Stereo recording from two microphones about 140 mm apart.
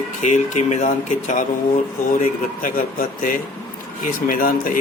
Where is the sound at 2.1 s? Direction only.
75° left (ahead or behind).